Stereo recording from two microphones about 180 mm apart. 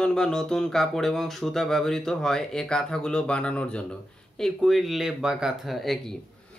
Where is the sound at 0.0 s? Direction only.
5° left (ahead or behind).